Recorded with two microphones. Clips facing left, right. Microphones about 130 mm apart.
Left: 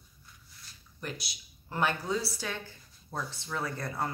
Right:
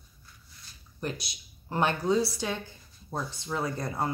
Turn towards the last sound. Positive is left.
turn(degrees=-20)  # may be behind; listen again after turning